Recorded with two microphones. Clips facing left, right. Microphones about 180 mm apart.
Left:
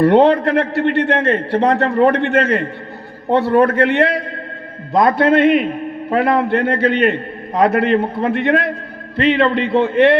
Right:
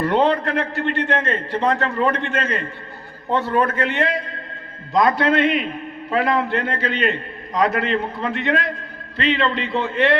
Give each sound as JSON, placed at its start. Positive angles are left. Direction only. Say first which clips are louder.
{"t": 0.0, "sound": "a man's voice", "louder": "left 7 dB", "side_deg": 65}
{"t": 4.9, "sound": "a man's voice", "louder": "left 5 dB", "side_deg": 55}